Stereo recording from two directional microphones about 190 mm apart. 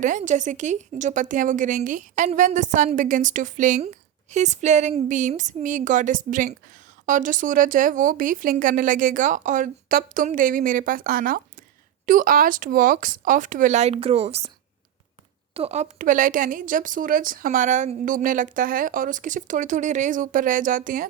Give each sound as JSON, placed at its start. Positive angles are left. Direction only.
{"t": 0.0, "sound": "a woman's voice", "side_deg": -40}
{"t": 15.5, "sound": "speech", "side_deg": -35}